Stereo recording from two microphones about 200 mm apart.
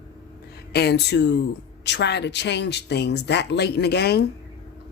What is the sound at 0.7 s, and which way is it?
Speech, 55° left (ahead or behind).